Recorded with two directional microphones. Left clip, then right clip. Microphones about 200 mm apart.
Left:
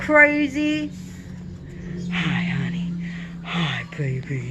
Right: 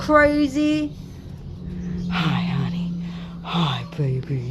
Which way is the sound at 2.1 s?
25° right (ahead or behind).